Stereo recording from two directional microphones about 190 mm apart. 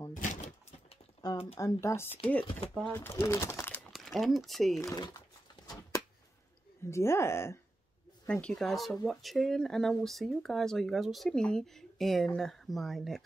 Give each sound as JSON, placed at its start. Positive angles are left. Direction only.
{"t": 0.1, "sound": "a sound", "side_deg": 40}
{"t": 1.2, "sound": "speech", "side_deg": 20}
{"t": 3.9, "sound": "speech", "side_deg": 0}
{"t": 4.8, "sound": "speech", "side_deg": 20}
{"t": 5.7, "sound": "a sound", "side_deg": 20}
{"t": 6.9, "sound": "speech", "side_deg": 15}